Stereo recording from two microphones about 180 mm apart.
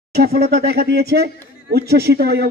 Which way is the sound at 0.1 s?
60° right (ahead or behind).